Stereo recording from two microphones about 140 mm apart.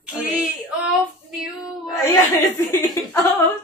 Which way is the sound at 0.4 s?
5° right (ahead or behind).